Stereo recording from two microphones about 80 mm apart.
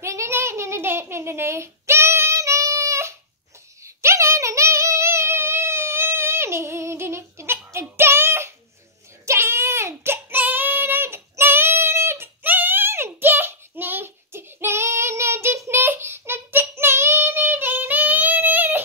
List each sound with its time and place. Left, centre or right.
0.0 s a sound: right
3.8 s female singing: right
9.2 s child singing: right